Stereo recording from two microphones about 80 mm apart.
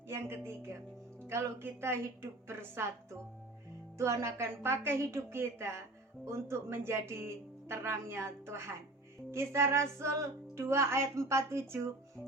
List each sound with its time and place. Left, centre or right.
0.1 s speech: right